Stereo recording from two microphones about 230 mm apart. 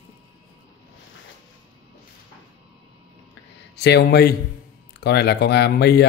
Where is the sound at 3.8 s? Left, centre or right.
Left.